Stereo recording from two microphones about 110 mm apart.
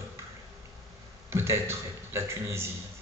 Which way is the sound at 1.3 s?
25° right (ahead or behind).